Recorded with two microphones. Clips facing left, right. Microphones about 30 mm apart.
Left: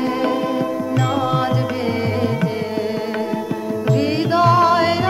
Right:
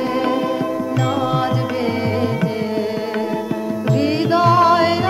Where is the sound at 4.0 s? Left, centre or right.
Centre.